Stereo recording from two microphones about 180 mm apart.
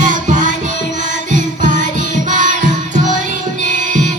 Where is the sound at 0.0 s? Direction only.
45° right (ahead or behind).